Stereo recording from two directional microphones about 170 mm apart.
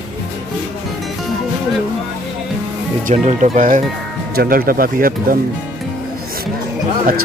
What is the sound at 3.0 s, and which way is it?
Speech, 45° right (ahead or behind).